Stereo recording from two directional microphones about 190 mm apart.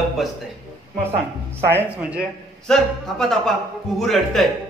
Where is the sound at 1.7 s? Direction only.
10° right (ahead or behind).